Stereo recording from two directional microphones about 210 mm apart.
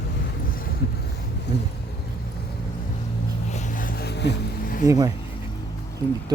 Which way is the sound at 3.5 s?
35° left (ahead or behind).